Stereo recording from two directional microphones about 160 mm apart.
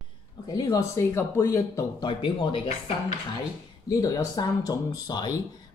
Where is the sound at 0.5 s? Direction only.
20° left (ahead or behind).